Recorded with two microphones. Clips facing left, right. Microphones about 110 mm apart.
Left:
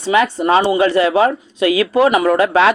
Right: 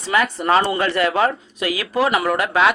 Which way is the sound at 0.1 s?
25° left (ahead or behind).